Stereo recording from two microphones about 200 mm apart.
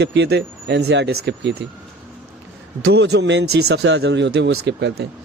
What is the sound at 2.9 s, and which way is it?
A man's voice, 55° right (ahead or behind).